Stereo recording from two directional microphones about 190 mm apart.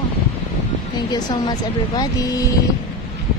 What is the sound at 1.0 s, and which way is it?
Speech, 20° left (ahead or behind).